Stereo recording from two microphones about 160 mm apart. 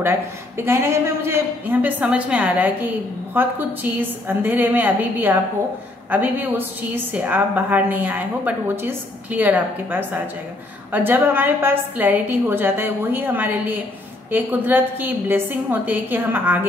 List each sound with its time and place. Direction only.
0.0 s a man's voice: 15° right (ahead or behind)